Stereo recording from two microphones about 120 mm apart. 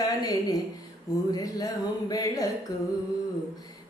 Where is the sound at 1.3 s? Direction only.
30° left (ahead or behind).